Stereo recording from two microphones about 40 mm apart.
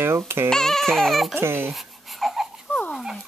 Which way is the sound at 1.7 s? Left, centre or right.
Centre.